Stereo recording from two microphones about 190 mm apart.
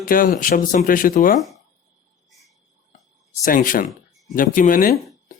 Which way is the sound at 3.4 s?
45° left (ahead or behind).